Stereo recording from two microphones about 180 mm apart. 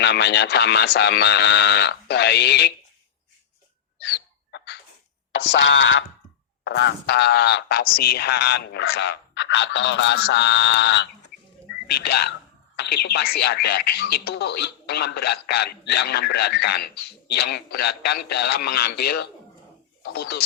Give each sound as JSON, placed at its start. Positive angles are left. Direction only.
{"t": 0.0, "sound": "speech", "side_deg": 70}
{"t": 4.0, "sound": "hiccup", "side_deg": 75}
{"t": 5.4, "sound": "a sound", "side_deg": 85}
{"t": 6.7, "sound": "speech", "side_deg": 75}
{"t": 11.9, "sound": "speech", "side_deg": 60}